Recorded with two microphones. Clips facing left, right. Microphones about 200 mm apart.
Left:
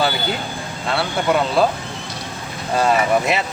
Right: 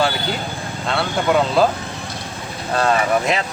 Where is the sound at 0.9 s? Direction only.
Centre (ahead or behind).